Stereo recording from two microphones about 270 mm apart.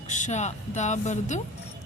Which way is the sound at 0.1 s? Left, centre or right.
Left.